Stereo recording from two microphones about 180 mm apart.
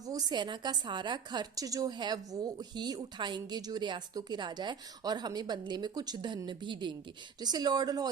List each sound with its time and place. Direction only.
0.0 s a woman's voice: 20° right (ahead or behind)